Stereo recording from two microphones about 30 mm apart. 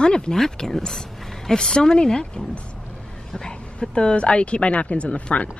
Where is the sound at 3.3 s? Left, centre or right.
Left.